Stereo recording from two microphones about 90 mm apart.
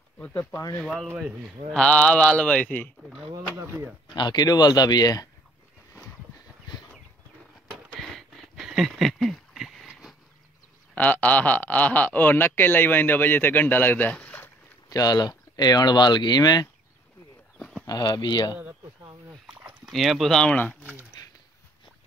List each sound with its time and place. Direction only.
0.3 s speech: 40° left (ahead or behind)
0.7 s speech: 5° left (ahead or behind)
4.1 s speech: 55° left (ahead or behind)
7.9 s a sound: 5° left (ahead or behind)
11.0 s speech: 20° left (ahead or behind)
14.9 s speech: 45° left (ahead or behind)
17.8 s speech: 50° left (ahead or behind)
19.9 s speech: centre (ahead or behind)